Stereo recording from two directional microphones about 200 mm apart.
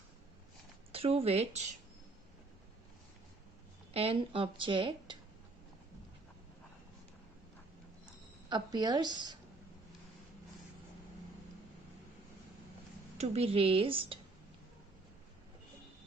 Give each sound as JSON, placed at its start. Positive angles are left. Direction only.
{"t": 0.9, "sound": "speech", "side_deg": -30}
{"t": 3.9, "sound": "speech", "side_deg": -30}
{"t": 8.4, "sound": "speech", "side_deg": -20}
{"t": 13.1, "sound": "speech", "side_deg": -30}